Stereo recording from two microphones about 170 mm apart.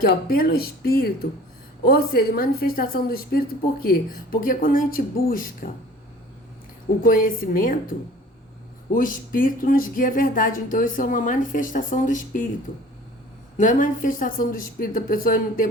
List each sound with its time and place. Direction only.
0.0 s a woman's voice: 60° left (ahead or behind)
7.0 s a woman's voice: 55° left (ahead or behind)
9.0 s speech: 55° left (ahead or behind)
13.6 s speech: 50° left (ahead or behind)